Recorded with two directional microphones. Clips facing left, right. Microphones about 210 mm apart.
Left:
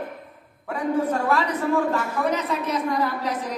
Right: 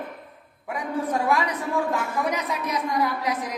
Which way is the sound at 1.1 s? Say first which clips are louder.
Left 1 dB; 10° right (ahead or behind).